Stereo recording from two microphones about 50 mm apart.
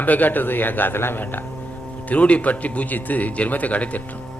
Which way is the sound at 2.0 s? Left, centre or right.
Left.